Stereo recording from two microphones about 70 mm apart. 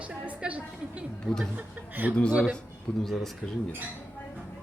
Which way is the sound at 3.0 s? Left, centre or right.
Centre.